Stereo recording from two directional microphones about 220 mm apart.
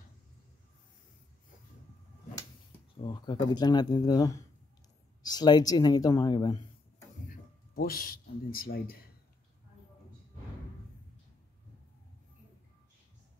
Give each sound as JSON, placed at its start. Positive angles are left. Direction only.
{"t": 3.0, "sound": "speech", "side_deg": 20}
{"t": 7.2, "sound": "speech", "side_deg": 40}